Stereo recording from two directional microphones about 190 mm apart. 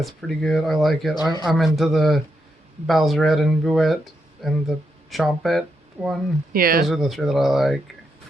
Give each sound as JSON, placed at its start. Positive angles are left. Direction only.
{"t": 0.0, "sound": "speech", "side_deg": 0}
{"t": 1.1, "sound": "speech", "side_deg": 20}
{"t": 1.5, "sound": "speech", "side_deg": 0}
{"t": 6.5, "sound": "speech", "side_deg": -50}
{"t": 6.8, "sound": "speech", "side_deg": 0}